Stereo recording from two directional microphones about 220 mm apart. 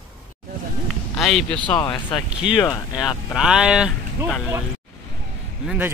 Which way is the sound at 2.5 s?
15° left (ahead or behind).